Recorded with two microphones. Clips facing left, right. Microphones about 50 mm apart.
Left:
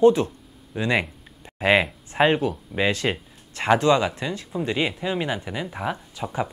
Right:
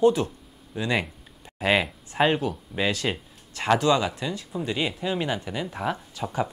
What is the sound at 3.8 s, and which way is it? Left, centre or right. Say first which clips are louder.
Speech: left 3 dB; left.